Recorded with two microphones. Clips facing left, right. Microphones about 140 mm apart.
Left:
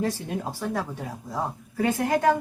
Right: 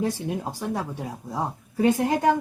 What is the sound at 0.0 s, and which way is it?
Speech, 20° right (ahead or behind).